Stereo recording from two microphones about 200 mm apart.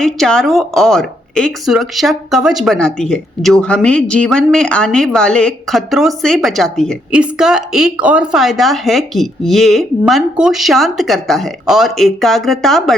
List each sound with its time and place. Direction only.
0.0 s a woman's voice: 5° left (ahead or behind)